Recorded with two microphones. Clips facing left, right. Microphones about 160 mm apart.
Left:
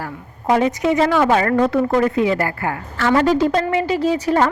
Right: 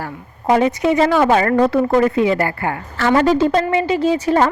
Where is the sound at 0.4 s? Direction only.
25° right (ahead or behind).